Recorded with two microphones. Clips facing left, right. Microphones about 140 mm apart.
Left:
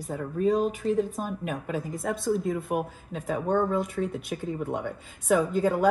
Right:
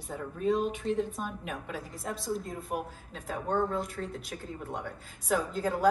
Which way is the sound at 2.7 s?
55° left (ahead or behind).